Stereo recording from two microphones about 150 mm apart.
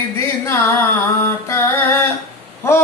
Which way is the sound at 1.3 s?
20° left (ahead or behind).